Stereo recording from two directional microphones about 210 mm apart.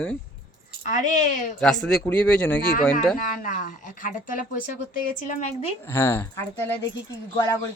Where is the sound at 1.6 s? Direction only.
5° left (ahead or behind).